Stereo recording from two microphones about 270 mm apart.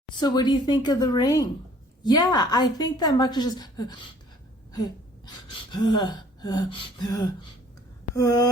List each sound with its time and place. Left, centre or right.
0.2 s a woman's voice: centre
4.7 s a sound: centre
5.7 s a woman's voice: centre